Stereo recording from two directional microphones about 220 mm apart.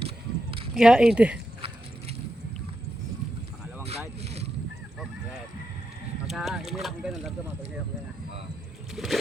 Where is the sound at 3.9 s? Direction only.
30° right (ahead or behind).